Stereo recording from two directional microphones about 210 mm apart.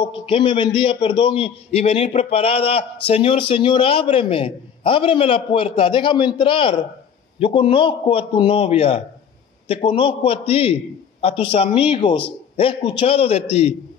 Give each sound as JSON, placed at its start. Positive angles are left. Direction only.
{"t": 0.0, "sound": "a man's voice", "side_deg": 25}